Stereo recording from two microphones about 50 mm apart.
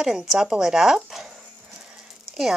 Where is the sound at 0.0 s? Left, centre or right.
Centre.